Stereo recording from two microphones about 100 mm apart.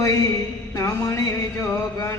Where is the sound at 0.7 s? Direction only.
30° left (ahead or behind).